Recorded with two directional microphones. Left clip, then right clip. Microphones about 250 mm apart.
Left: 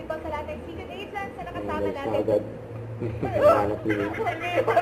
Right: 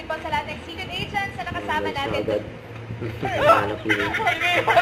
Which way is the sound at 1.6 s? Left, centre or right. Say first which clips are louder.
Right 3 dB; centre.